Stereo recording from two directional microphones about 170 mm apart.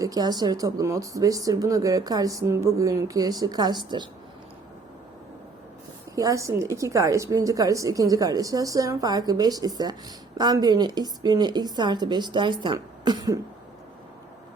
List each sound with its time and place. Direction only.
0.0 s speech: 20° right (ahead or behind)
6.1 s speech: 20° right (ahead or behind)